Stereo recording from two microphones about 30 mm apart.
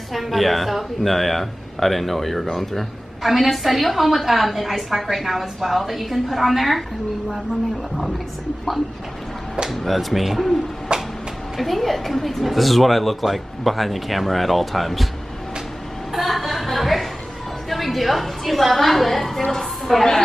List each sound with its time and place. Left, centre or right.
0.1 s a woman's voice: centre
3.2 s a woman's voice: centre
9.8 s a woman's voice: centre
10.9 s a sound: right
11.6 s a woman's voice: centre
16.1 s a sound: centre
17.6 s a woman's voice: centre